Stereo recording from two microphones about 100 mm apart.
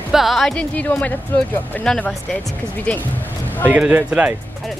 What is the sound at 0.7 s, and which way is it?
Speech, 15° left (ahead or behind).